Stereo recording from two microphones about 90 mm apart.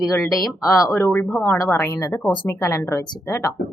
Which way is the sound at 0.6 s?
40° left (ahead or behind).